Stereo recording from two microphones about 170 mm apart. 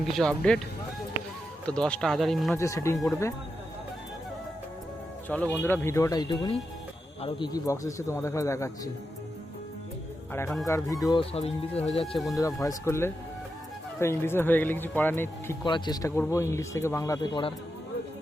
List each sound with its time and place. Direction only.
0.2 s speech: 5° left (ahead or behind)
1.6 s speech: 5° left (ahead or behind)
2.6 s a man's voice: 15° left (ahead or behind)
5.3 s a man's voice: 10° left (ahead or behind)
10.7 s a man's voice: 20° left (ahead or behind)
11.2 s speech: 35° left (ahead or behind)
12.1 s speech: centre (ahead or behind)
12.4 s a man's voice: 20° left (ahead or behind)
15.6 s a man's voice: 25° left (ahead or behind)